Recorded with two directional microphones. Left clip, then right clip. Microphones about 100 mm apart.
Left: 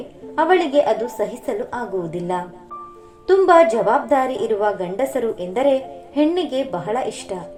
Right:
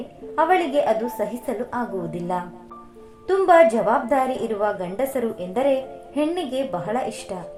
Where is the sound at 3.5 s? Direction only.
15° left (ahead or behind).